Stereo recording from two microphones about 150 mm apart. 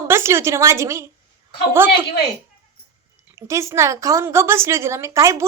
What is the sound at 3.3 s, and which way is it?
A woman's voice, 20° right (ahead or behind).